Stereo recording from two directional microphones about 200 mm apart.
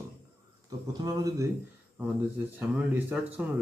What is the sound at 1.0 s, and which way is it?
Speech, 20° right (ahead or behind).